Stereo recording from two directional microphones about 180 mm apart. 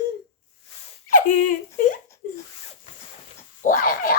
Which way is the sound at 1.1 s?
45° left (ahead or behind).